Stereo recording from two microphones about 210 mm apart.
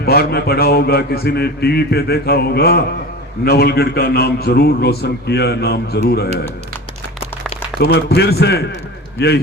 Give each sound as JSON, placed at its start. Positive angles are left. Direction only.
{"t": 0.0, "sound": "speech", "side_deg": 50}
{"t": 7.8, "sound": "a man's voice", "side_deg": 50}